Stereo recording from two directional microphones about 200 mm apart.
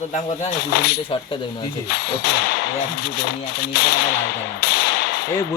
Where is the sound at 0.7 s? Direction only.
55° left (ahead or behind).